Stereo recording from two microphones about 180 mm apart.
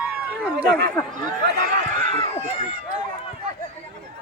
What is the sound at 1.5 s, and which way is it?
Run, 40° right (ahead or behind).